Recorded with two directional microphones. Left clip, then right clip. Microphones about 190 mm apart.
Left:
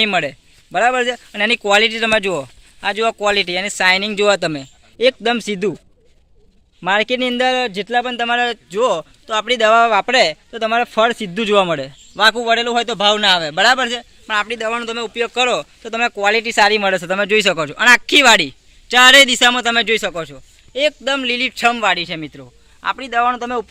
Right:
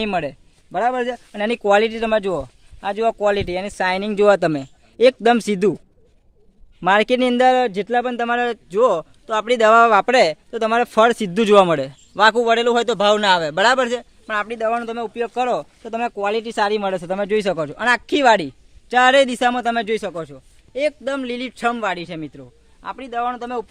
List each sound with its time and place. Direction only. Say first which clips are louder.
0.0 s speech: left 6 dB; 25° right (ahead or behind); by 5.7 s 65° right (ahead or behind)
6.8 s a man's voice: right 1 dB; 60° right (ahead or behind); by 23.0 s 5° right (ahead or behind)
23.0 s a man's voice: left 6 dB; 15° left (ahead or behind)